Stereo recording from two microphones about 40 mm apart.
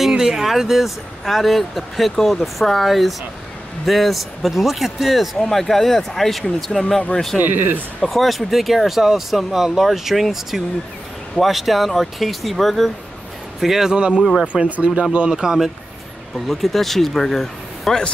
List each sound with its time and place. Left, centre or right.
0.2 s speech: centre
7.3 s speech: right
8.0 s speech: centre
13.9 s speech: right
15.3 s speech: centre
16.3 s speech: centre